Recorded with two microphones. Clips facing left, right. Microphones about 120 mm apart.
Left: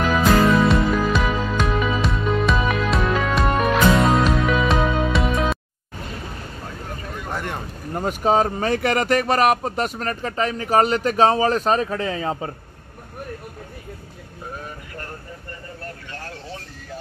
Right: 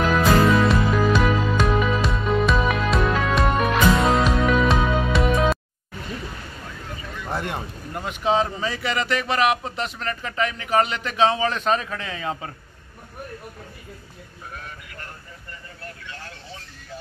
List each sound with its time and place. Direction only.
0.0 s music: centre (ahead or behind)
7.2 s vehicle: 15° right (ahead or behind)
7.9 s speech: 40° left (ahead or behind)
16.1 s a sound: 45° left (ahead or behind)